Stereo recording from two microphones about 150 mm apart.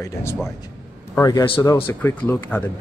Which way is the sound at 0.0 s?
15° left (ahead or behind).